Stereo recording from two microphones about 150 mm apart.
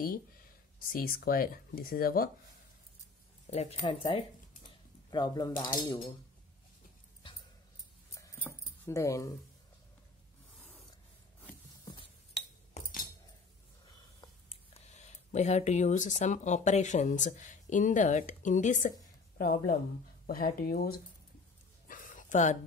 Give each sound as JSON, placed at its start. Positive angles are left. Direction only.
{"t": 0.7, "sound": "speech", "side_deg": 70}
{"t": 3.5, "sound": "speech", "side_deg": 50}
{"t": 3.8, "sound": "speech", "side_deg": 35}
{"t": 8.2, "sound": "keys jangling", "side_deg": 15}
{"t": 11.8, "sound": "cutlery", "side_deg": 30}
{"t": 12.8, "sound": "cutlery", "side_deg": 50}
{"t": 14.7, "sound": "speech", "side_deg": 50}
{"t": 19.3, "sound": "speech", "side_deg": 75}
{"t": 20.2, "sound": "speech", "side_deg": 85}
{"t": 21.8, "sound": "a sound", "side_deg": 60}